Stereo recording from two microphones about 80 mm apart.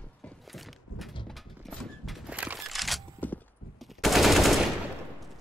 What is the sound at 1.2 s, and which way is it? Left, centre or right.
Horse, centre.